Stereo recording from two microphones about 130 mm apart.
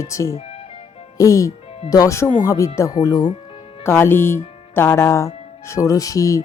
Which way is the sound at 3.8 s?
20° left (ahead or behind).